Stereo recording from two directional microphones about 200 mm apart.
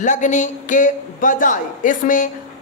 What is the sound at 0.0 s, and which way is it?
A man's voice, 40° left (ahead or behind).